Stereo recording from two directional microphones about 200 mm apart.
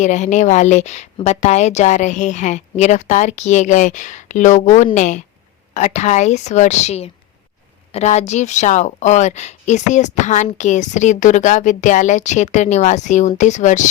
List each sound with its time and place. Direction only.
0.0 s a woman's voice: 35° left (ahead or behind)